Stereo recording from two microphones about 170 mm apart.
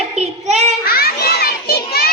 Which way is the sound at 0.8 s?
65° left (ahead or behind).